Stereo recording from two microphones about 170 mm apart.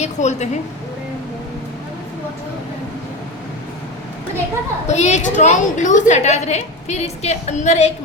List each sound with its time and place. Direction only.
0.0 s a woman's voice: 40° left (ahead or behind)
4.9 s a woman's voice: 40° left (ahead or behind)